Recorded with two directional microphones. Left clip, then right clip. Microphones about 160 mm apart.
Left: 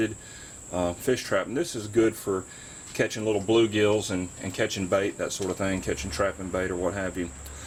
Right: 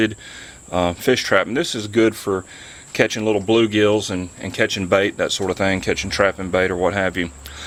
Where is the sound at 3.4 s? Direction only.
25° right (ahead or behind).